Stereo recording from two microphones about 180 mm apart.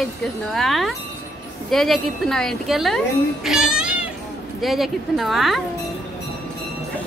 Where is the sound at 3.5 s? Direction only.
5° right (ahead or behind).